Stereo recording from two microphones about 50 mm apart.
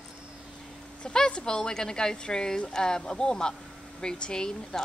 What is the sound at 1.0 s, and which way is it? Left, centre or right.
Speech, centre.